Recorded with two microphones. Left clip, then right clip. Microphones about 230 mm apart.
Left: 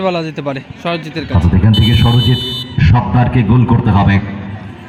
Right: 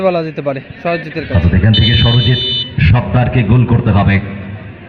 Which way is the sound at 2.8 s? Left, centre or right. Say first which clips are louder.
Left 1 dB; left.